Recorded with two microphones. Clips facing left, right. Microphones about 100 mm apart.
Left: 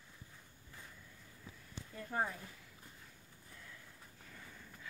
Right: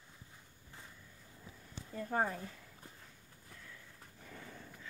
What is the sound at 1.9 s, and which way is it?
Speech, 40° right (ahead or behind).